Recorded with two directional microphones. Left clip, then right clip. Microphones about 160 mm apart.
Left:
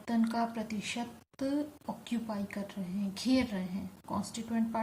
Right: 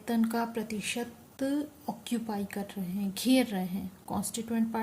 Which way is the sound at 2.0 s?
90° right.